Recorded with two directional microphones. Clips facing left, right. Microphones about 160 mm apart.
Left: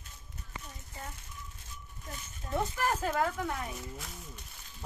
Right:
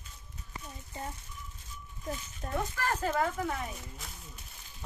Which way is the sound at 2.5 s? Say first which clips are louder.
Left 2 dB; 15° left (ahead or behind).